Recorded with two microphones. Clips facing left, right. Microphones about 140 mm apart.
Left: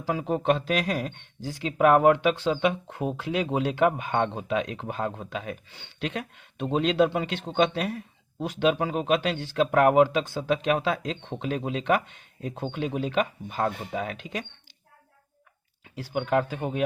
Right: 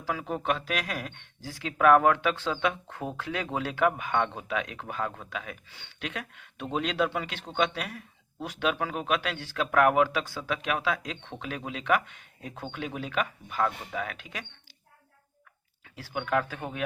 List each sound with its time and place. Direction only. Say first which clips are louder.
0.0 s speech: left 5 dB; 25° left (ahead or behind)
15.8 s speech: left 5 dB; 20° left (ahead or behind)